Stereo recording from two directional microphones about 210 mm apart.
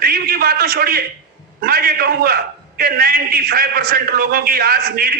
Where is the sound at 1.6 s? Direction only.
45° right (ahead or behind).